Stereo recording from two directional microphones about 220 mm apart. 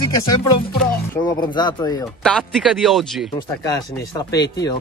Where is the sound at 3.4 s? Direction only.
15° left (ahead or behind).